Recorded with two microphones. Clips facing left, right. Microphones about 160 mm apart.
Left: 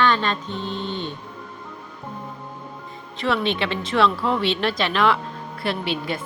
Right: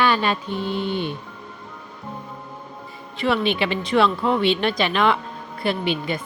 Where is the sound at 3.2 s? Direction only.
5° right (ahead or behind).